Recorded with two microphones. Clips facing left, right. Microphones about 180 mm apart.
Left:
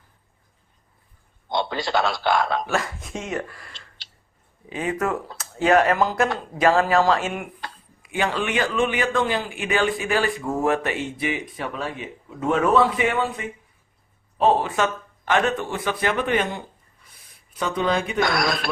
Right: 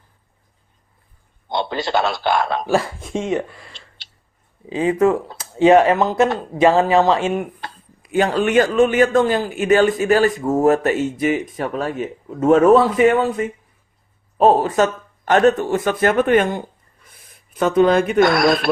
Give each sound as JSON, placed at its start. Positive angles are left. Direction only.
{"t": 1.8, "sound": "speech", "side_deg": -25}
{"t": 8.0, "sound": "speech", "side_deg": -40}